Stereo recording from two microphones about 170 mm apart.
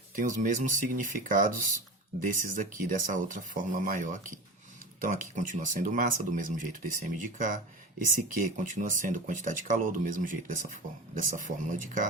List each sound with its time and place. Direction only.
0.2 s speech: 50° right (ahead or behind)